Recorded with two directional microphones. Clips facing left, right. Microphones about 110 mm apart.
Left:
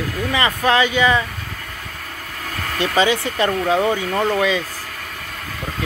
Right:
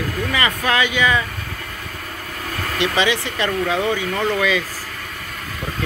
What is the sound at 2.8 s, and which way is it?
Speech, 35° left (ahead or behind).